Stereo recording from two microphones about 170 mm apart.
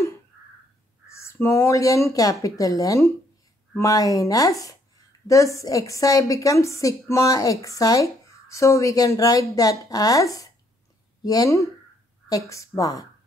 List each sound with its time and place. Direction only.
1.1 s a woman's voice: 15° left (ahead or behind)